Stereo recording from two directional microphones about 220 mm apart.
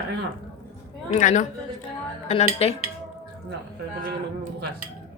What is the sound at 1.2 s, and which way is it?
A man's voice, 35° left (ahead or behind).